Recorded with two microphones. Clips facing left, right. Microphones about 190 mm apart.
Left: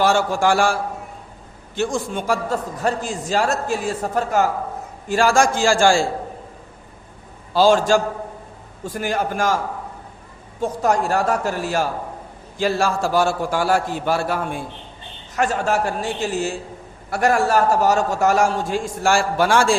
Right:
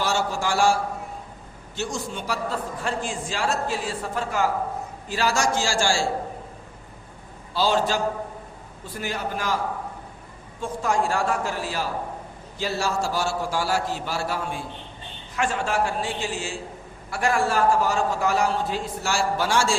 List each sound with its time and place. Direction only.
0.0 s a man's voice: 55° left (ahead or behind)
7.5 s a man's voice: 45° left (ahead or behind)
10.6 s a man's voice: 40° left (ahead or behind)
15.4 s a man's voice: 40° left (ahead or behind)